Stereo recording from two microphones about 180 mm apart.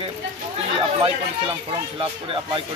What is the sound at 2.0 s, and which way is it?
Speech, 30° right (ahead or behind).